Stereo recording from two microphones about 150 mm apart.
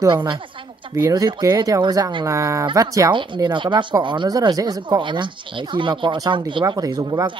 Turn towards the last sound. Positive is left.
turn(degrees=-25)  # may be behind; listen again after turning